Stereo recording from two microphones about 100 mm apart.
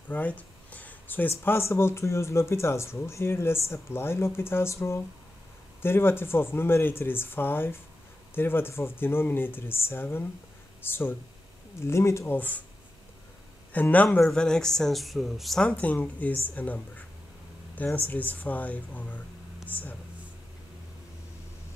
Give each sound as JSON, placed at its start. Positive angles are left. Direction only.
{"t": 0.1, "sound": "a sound", "side_deg": 15}
{"t": 1.4, "sound": "speech", "side_deg": 25}
{"t": 13.7, "sound": "speech", "side_deg": 15}
{"t": 15.7, "sound": "speech", "side_deg": 15}